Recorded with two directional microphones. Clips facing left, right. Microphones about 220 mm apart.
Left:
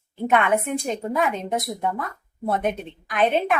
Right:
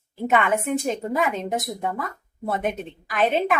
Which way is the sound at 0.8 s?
Centre (ahead or behind).